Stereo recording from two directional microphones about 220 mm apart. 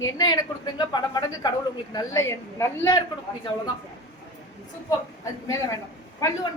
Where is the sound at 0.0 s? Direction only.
15° left (ahead or behind).